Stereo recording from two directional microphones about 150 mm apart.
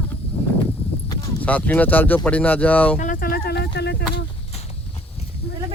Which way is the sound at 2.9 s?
60° left (ahead or behind).